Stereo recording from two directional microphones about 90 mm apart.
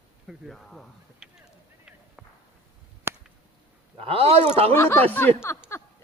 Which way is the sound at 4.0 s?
90° right.